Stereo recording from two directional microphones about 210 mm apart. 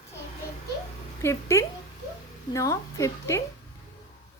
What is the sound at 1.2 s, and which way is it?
Speech, 15° left (ahead or behind).